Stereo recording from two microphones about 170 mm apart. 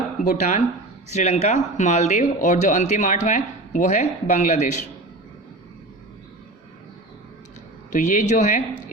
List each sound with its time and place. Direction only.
0.3 s speech: 45° left (ahead or behind)
7.9 s speech: 50° left (ahead or behind)